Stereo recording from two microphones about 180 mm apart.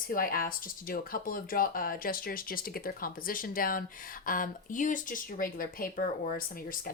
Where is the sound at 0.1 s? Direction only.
50° left (ahead or behind).